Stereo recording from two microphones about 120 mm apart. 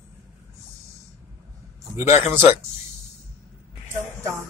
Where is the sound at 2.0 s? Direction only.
20° right (ahead or behind).